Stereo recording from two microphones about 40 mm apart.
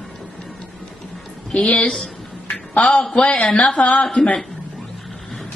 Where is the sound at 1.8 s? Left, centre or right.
Left.